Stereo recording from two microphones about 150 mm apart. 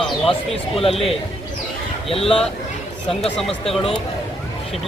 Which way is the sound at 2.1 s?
40° left (ahead or behind).